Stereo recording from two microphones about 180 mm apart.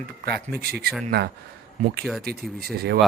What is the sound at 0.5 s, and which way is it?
Speech, 60° right (ahead or behind).